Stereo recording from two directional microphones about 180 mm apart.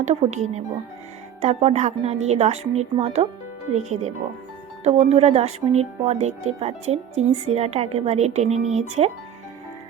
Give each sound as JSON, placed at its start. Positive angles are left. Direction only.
{"t": 0.0, "sound": "speech", "side_deg": -40}